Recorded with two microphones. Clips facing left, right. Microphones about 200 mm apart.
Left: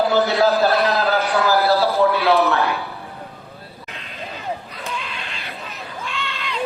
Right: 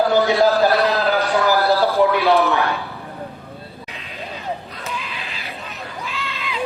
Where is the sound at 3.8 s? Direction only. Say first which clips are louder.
Left 1 dB; centre (ahead or behind).